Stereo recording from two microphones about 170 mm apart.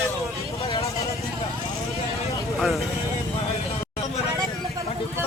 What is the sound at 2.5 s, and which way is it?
Speech, centre (ahead or behind).